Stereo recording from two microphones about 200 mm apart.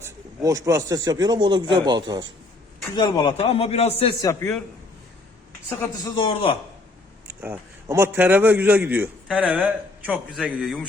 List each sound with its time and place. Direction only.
0.0 s speech: 15° right (ahead or behind)
2.9 s speech: 20° left (ahead or behind)
4.2 s a man's voice: 15° left (ahead or behind)
6.1 s speech: 25° left (ahead or behind)
7.3 s a man's voice: 10° right (ahead or behind)